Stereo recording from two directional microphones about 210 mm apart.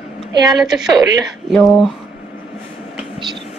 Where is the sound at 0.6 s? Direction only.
5° right (ahead or behind).